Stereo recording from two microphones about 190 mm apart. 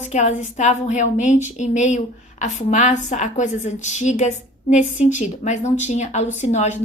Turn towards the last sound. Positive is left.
turn(degrees=35)  # may be behind; listen again after turning